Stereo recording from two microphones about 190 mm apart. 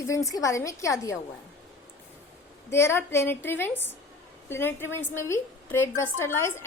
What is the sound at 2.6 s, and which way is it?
A woman's voice, 15° left (ahead or behind).